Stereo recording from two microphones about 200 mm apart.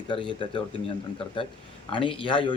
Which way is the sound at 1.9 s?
25° left (ahead or behind).